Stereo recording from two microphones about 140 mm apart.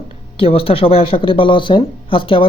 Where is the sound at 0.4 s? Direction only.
40° left (ahead or behind).